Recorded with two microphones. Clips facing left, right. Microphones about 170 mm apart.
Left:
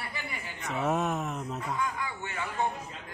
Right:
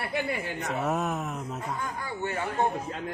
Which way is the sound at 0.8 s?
Centre (ahead or behind).